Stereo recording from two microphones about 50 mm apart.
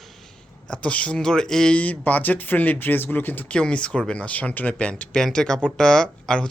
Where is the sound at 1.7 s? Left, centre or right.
Left.